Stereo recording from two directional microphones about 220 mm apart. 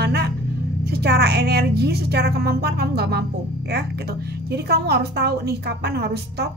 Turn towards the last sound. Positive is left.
turn(degrees=-50)  # may be behind; listen again after turning